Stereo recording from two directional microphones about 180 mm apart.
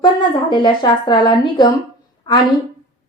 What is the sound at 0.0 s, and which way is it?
A woman's voice, 25° left (ahead or behind).